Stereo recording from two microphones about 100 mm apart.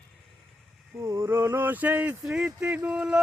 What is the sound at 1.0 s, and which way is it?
Speech, 30° right (ahead or behind).